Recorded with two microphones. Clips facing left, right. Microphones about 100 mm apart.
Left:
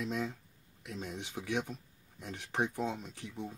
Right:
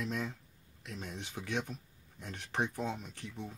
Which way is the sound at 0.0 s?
15° left (ahead or behind).